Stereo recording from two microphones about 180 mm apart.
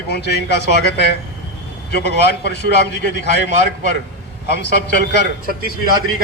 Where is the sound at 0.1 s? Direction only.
70° left (ahead or behind).